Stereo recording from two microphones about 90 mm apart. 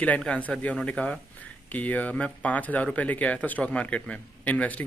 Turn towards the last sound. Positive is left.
turn(degrees=15)  # may be behind; listen again after turning